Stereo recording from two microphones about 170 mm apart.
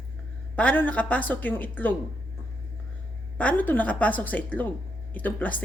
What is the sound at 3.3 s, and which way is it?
A woman's voice, 10° left (ahead or behind).